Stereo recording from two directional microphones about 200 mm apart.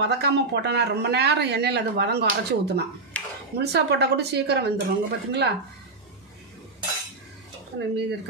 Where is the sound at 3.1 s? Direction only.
5° left (ahead or behind).